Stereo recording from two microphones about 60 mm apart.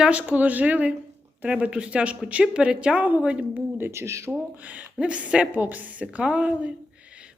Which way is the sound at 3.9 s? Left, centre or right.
Right.